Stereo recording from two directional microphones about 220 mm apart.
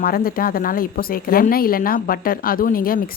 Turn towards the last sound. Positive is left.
turn(degrees=40)  # may be behind; listen again after turning